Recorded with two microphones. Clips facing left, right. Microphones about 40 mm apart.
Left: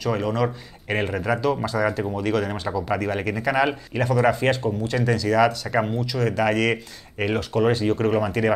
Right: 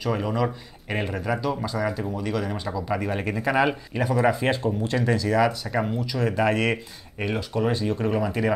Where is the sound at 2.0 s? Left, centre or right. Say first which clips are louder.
Left 4 dB; centre.